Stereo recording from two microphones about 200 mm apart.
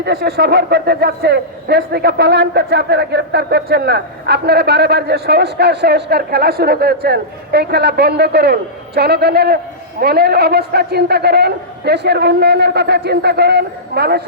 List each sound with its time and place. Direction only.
0.0 s a man's voice: 55° right (ahead or behind)